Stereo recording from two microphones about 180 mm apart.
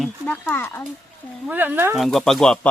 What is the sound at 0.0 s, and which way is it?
Speech, 10° left (ahead or behind).